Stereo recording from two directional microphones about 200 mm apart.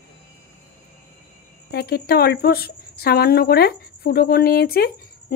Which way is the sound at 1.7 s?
50° left (ahead or behind).